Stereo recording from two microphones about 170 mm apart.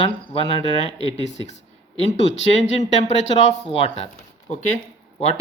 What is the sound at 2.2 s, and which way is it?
Speech, 90° left.